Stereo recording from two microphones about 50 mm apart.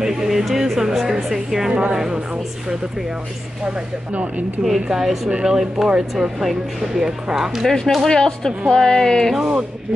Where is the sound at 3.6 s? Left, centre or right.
Right.